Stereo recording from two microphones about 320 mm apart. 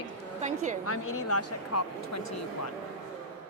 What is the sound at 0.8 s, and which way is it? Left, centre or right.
A woman's voice, left.